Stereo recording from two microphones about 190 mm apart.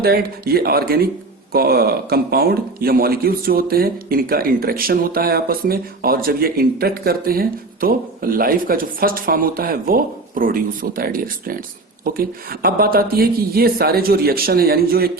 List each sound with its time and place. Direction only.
0.0 s speech: 55° right (ahead or behind)